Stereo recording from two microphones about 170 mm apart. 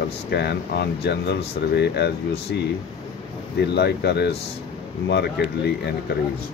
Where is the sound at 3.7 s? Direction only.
75° left (ahead or behind).